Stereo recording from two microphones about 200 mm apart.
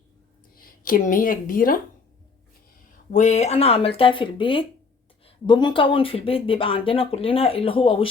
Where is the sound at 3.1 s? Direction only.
35° left (ahead or behind).